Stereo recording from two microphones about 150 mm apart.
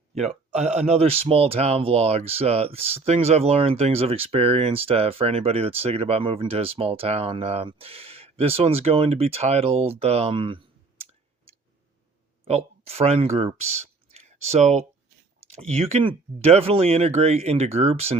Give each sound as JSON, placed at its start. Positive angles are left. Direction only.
{"t": 0.1, "sound": "speech", "side_deg": -45}
{"t": 12.5, "sound": "speech", "side_deg": -45}